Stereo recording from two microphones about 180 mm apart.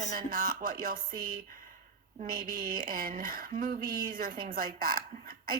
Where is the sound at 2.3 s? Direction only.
55° right (ahead or behind).